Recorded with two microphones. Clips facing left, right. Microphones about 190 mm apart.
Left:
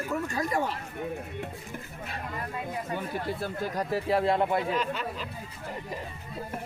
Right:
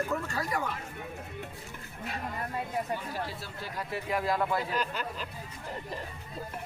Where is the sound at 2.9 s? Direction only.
55° left (ahead or behind); by 4.6 s 25° left (ahead or behind).